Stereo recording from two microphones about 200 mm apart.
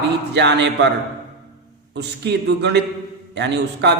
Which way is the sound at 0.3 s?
60° right (ahead or behind).